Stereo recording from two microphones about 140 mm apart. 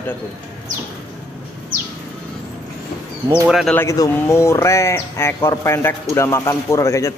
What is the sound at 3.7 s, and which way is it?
Speech, 20° left (ahead or behind).